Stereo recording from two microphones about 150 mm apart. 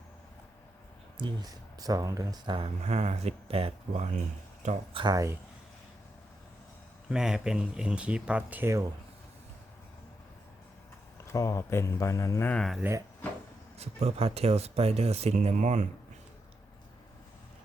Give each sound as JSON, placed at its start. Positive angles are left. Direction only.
{"t": 1.1, "sound": "speech", "side_deg": -30}
{"t": 2.8, "sound": "speech", "side_deg": -45}
{"t": 4.9, "sound": "speech", "side_deg": -25}
{"t": 7.1, "sound": "speech", "side_deg": -5}
{"t": 11.3, "sound": "speech", "side_deg": 20}
{"t": 12.8, "sound": "speech", "side_deg": -10}
{"t": 13.7, "sound": "speech", "side_deg": -45}